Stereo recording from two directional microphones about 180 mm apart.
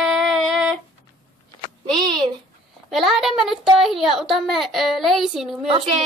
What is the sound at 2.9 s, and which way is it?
A child's voice, centre (ahead or behind).